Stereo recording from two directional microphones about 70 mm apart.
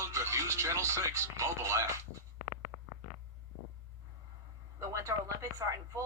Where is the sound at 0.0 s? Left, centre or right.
Right.